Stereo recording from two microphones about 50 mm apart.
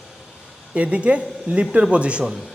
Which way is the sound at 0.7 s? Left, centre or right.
Right.